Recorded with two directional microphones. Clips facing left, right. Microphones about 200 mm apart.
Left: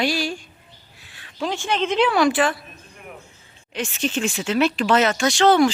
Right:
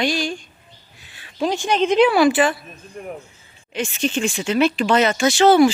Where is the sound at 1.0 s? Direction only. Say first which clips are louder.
Right 1 dB; centre (ahead or behind).